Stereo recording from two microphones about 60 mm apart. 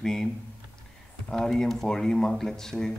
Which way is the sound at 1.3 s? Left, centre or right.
Centre.